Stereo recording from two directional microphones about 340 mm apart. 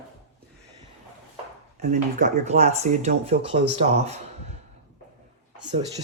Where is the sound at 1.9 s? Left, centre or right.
Right.